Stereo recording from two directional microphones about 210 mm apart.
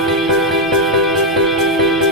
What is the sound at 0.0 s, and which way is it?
Music, centre (ahead or behind).